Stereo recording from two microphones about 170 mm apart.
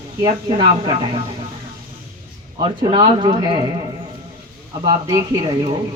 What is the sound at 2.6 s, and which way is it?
Speech, 30° right (ahead or behind).